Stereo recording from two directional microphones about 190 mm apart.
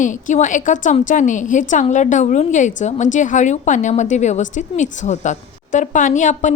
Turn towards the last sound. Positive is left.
turn(degrees=40)  # may be behind; listen again after turning